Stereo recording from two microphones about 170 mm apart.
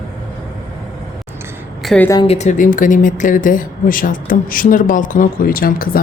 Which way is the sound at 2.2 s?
40° left (ahead or behind).